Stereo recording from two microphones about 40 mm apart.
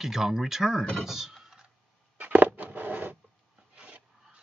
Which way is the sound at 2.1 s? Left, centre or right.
Right.